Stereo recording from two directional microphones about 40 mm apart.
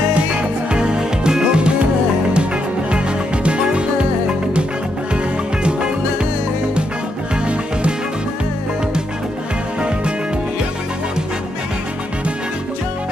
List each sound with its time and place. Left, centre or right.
0.4 s music: right
3.4 s music: right
5.1 s music: right